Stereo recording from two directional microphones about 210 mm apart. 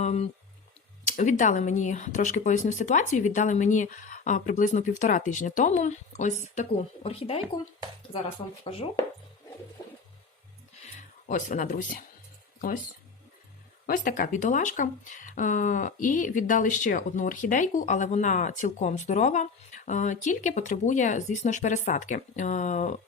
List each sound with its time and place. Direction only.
0.0 s speech: 30° left (ahead or behind)
10.8 s speech: 35° left (ahead or behind)
13.8 s speech: 40° left (ahead or behind)